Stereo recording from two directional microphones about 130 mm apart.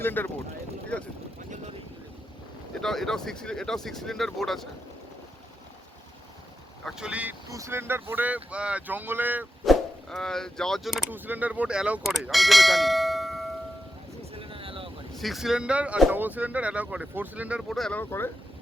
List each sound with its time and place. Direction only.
0.0 s speech: 15° left (ahead or behind)
2.8 s speech: 5° left (ahead or behind)
6.8 s speech: 10° right (ahead or behind)
7.5 s speech: 20° right (ahead or behind)
9.6 s speech: 5° left (ahead or behind)
11.1 s speech: 10° right (ahead or behind)
14.3 s a sound: 45° right (ahead or behind)
15.1 s speech: centre (ahead or behind)
17.7 s speech: 5° left (ahead or behind)
18.0 s speech: 15° left (ahead or behind)